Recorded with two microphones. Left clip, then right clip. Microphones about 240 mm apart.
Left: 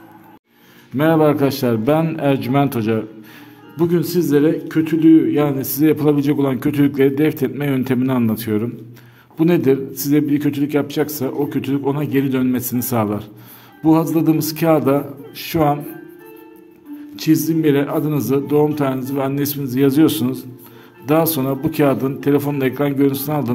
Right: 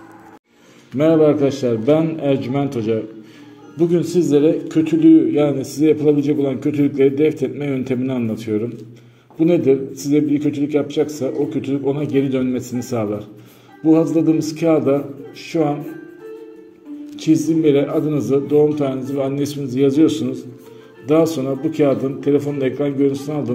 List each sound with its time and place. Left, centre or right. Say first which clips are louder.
0.9 s a man's voice: right 1 dB; left
17.1 s speech: even; left